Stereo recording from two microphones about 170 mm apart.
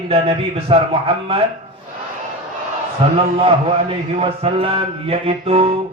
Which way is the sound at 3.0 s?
35° right (ahead or behind).